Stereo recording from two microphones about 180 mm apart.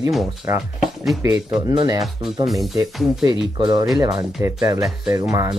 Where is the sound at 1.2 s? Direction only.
15° right (ahead or behind).